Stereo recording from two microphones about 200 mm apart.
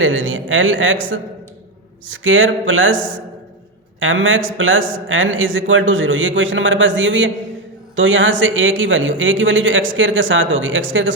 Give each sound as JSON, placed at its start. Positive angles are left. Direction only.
{"t": 0.0, "sound": "speech", "side_deg": -75}